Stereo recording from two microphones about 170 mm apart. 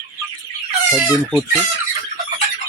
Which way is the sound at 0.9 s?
Centre (ahead or behind).